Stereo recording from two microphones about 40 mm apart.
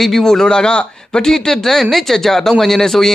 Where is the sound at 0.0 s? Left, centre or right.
Centre.